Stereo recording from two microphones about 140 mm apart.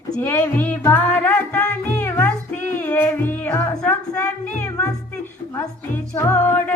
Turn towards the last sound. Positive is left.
turn(degrees=20)  # may be behind; listen again after turning